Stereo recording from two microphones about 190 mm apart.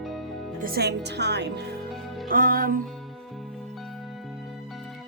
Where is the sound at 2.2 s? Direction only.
50° right (ahead or behind).